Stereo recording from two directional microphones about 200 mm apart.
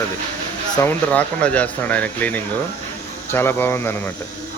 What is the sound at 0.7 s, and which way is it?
Speech, 10° left (ahead or behind).